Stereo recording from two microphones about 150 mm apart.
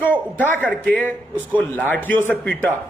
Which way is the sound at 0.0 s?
10° left (ahead or behind).